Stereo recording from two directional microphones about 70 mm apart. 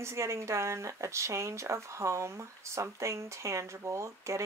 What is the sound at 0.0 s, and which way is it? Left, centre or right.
Speech, right.